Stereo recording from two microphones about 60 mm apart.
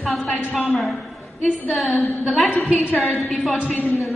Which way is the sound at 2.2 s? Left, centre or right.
Centre.